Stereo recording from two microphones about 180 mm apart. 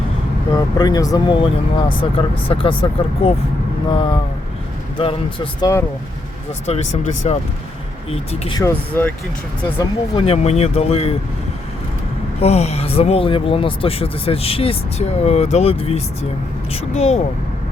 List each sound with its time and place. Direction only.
0.5 s speech: 20° left (ahead or behind)
6.7 s speech: 40° left (ahead or behind)
8.5 s speech: 15° left (ahead or behind)
9.7 s speech: 30° left (ahead or behind)
12.4 s speech: 35° left (ahead or behind)